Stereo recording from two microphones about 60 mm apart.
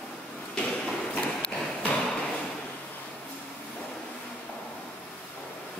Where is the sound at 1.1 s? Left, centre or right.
Centre.